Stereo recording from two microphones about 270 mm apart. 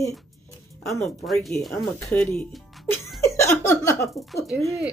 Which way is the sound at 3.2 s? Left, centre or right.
Centre.